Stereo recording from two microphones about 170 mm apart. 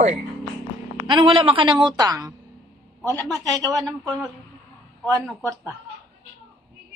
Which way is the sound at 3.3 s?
20° right (ahead or behind).